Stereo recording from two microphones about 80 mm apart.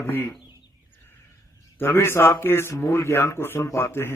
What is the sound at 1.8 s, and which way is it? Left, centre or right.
A man's voice, left.